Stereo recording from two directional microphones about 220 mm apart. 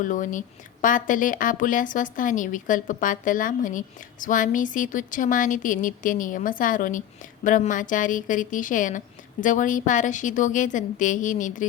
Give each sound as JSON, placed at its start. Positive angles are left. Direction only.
{"t": 0.0, "sound": "speech", "side_deg": 35}